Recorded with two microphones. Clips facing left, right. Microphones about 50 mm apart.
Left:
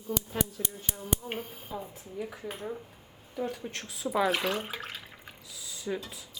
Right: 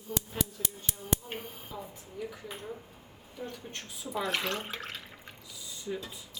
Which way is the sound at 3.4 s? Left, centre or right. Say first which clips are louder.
Left 6 dB; left.